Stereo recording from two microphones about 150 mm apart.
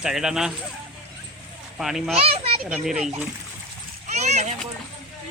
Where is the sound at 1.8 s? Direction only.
Centre (ahead or behind).